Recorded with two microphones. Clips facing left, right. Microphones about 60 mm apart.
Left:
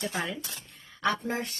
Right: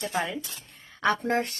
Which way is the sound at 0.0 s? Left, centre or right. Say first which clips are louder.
Right 3 dB; right.